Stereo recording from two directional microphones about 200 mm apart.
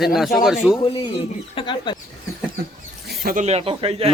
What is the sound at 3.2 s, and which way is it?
Speech, 40° right (ahead or behind).